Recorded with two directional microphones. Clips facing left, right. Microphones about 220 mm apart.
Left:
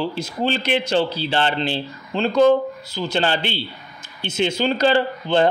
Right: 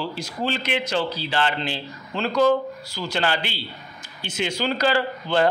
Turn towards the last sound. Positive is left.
turn(degrees=25)  # may be behind; listen again after turning